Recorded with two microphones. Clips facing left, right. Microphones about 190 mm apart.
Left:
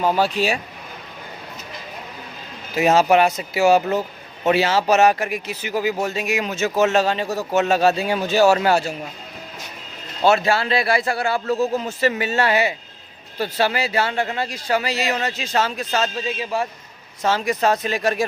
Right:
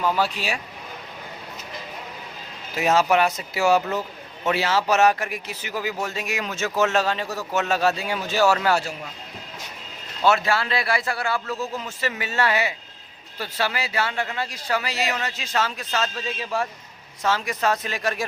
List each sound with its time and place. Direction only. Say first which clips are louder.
0.0 s speech: left 5 dB; 25° left (ahead or behind)
2.7 s speech: left 4 dB; 25° left (ahead or behind)
10.2 s speech: left 3 dB; 30° left (ahead or behind)
16.2 s speech: left 3 dB; 15° left (ahead or behind)
17.2 s speech: left 4 dB; 30° left (ahead or behind)